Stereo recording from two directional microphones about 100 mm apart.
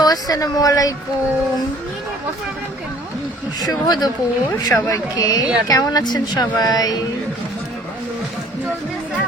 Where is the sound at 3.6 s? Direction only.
40° left (ahead or behind).